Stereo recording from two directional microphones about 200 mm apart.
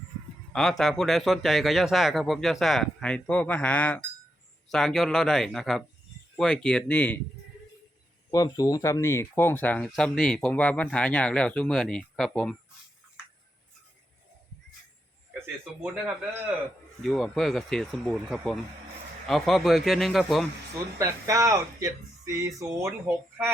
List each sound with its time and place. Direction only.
0.5 s speech: centre (ahead or behind)
8.3 s speech: 15° left (ahead or behind)
17.0 s speech: centre (ahead or behind)
21.0 s speech: 15° right (ahead or behind)